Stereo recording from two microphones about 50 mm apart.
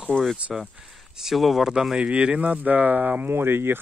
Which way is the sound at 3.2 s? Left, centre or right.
Right.